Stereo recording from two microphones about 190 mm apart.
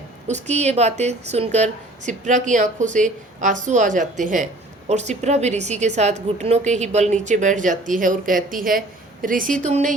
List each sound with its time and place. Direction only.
0.3 s a woman's voice: 35° right (ahead or behind)